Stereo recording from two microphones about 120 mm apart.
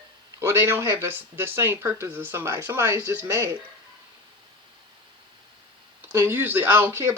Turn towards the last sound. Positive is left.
turn(degrees=-20)  # may be behind; listen again after turning